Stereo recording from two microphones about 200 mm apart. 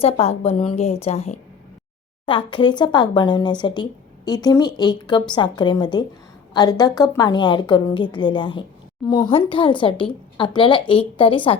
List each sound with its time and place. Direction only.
0.0 s a woman's voice: 30° left (ahead or behind)